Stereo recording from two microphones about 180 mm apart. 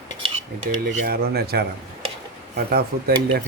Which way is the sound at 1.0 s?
55° right (ahead or behind).